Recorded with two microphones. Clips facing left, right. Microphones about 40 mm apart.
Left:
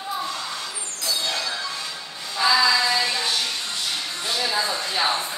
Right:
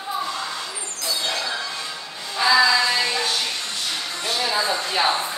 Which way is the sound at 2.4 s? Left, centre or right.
Centre.